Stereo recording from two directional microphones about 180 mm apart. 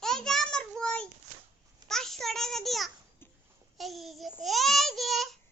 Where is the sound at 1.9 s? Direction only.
Centre (ahead or behind).